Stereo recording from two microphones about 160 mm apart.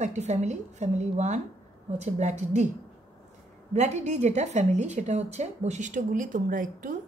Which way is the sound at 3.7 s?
45° right (ahead or behind).